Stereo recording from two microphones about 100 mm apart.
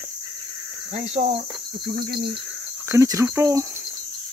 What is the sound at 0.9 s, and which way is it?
Cricket, 90° right.